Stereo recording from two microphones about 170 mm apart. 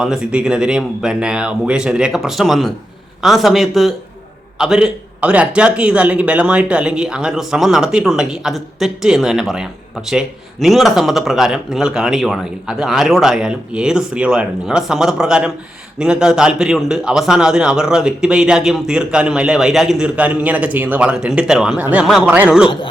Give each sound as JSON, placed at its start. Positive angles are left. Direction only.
{"t": 0.0, "sound": "a man's voice", "side_deg": -5}